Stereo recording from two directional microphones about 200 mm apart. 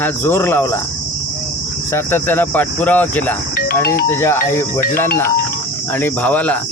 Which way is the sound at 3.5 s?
45° left (ahead or behind).